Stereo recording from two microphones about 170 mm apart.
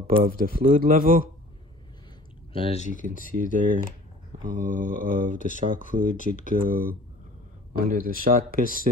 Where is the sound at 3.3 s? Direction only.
50° right (ahead or behind).